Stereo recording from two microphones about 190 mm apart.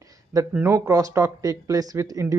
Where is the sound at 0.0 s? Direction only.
15° right (ahead or behind).